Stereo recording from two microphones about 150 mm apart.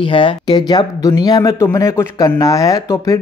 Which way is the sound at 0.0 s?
35° left (ahead or behind).